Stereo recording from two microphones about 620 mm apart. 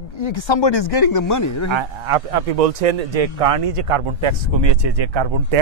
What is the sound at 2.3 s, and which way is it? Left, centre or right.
Speech, right.